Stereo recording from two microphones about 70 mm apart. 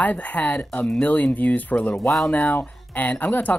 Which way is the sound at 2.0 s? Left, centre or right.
Centre.